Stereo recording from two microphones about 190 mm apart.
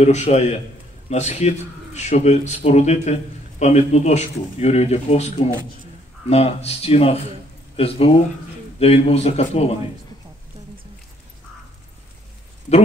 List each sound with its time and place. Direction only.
0.0 s a man's voice: 35° left (ahead or behind)